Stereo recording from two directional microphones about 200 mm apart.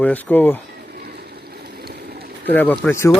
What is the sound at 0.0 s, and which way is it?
Speech, 10° left (ahead or behind).